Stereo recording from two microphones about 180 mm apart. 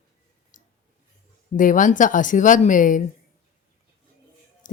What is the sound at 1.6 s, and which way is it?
Speech, 45° left (ahead or behind).